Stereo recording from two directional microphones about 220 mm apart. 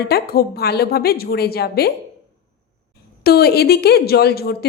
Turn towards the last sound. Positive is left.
turn(degrees=45)  # may be behind; listen again after turning